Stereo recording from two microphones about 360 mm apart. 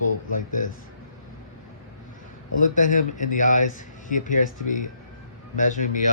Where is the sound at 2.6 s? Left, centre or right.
Left.